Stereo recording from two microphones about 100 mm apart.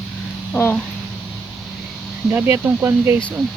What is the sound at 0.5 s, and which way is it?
Speech, 15° left (ahead or behind).